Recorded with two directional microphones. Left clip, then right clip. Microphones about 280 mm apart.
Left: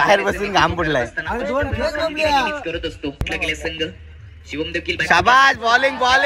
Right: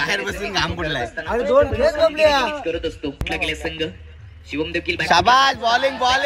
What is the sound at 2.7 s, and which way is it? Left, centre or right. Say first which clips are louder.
A man's voice: right 1 dB; right.